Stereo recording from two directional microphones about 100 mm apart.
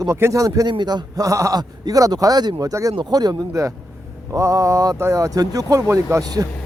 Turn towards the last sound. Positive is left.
turn(degrees=-40)  # may be behind; listen again after turning